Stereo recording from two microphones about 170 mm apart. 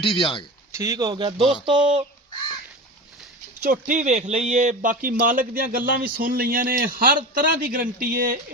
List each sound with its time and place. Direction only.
0.0 s speech: 30° left (ahead or behind)
0.7 s speech: 20° right (ahead or behind)
3.6 s speech: 50° right (ahead or behind)